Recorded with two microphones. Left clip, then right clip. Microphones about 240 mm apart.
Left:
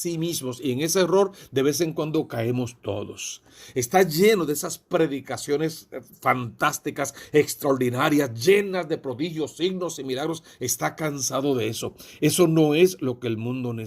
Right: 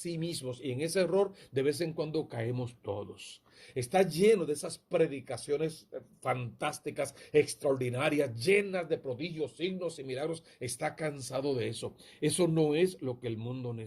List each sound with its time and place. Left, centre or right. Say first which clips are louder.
0.0 s speech: left 9 dB; left